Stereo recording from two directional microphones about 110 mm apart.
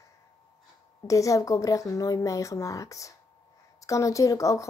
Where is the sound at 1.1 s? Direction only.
30° left (ahead or behind).